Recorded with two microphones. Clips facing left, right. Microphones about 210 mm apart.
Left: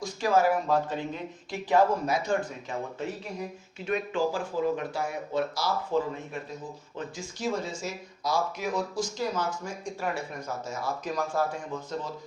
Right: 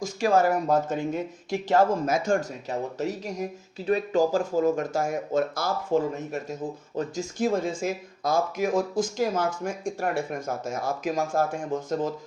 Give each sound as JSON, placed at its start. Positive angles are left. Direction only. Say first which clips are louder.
{"t": 0.7, "sound": "speech", "louder": "right 4 dB", "side_deg": -45}